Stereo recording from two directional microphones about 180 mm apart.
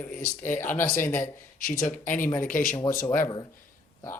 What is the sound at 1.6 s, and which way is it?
Speech, 50° left (ahead or behind).